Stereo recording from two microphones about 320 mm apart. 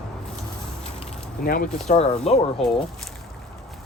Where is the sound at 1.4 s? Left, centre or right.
Left.